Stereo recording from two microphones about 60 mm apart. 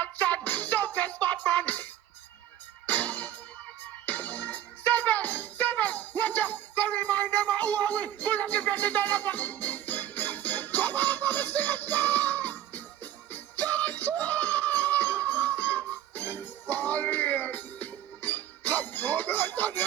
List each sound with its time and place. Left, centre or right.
0.0 s music: left